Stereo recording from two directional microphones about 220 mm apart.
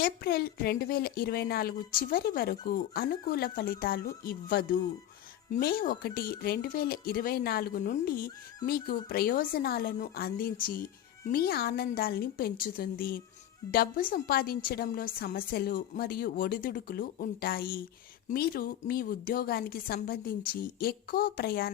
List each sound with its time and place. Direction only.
0.0 s a woman's voice: 45° left (ahead or behind)